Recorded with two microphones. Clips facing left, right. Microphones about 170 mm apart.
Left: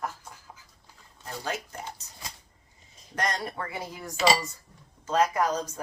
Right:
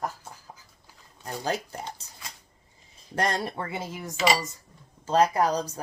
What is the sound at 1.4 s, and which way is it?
Speech, 35° right (ahead or behind).